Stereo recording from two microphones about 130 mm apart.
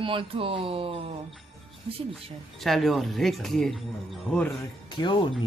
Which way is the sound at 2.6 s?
Centre (ahead or behind).